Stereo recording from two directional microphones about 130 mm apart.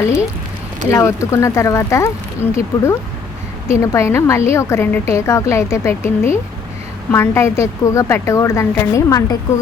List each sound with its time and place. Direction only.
0.9 s a woman's voice: 20° left (ahead or behind)